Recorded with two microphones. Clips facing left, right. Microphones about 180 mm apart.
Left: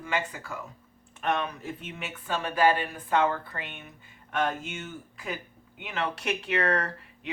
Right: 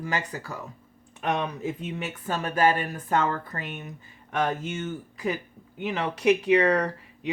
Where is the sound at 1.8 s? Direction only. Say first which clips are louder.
Right 6 dB; 40° right (ahead or behind).